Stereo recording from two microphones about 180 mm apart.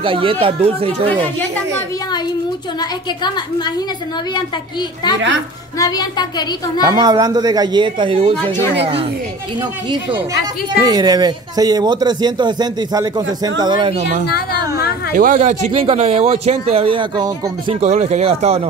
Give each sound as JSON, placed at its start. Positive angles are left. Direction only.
{"t": 0.0, "sound": "speech", "side_deg": -30}
{"t": 2.8, "sound": "a woman's voice", "side_deg": 25}
{"t": 5.8, "sound": "a woman's voice", "side_deg": 20}
{"t": 6.8, "sound": "speech", "side_deg": -20}
{"t": 9.6, "sound": "speech", "side_deg": -25}
{"t": 15.1, "sound": "speech", "side_deg": -45}
{"t": 17.7, "sound": "speech", "side_deg": -40}